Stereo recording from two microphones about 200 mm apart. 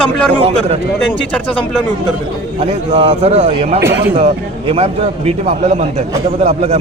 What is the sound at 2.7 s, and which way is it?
A man's voice, 30° right (ahead or behind).